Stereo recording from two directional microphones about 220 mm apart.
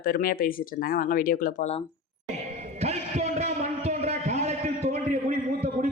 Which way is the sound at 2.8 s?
30° right (ahead or behind).